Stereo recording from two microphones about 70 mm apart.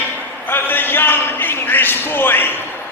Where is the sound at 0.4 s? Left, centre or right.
Left.